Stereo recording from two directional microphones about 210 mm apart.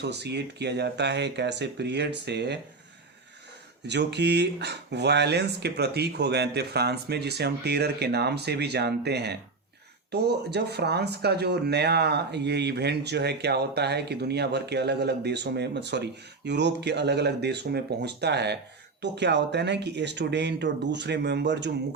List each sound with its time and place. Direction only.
0.0 s speech: 55° right (ahead or behind)
3.8 s speech: 55° right (ahead or behind)